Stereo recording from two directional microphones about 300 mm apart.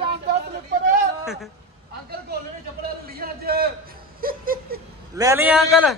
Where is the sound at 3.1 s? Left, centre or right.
Right.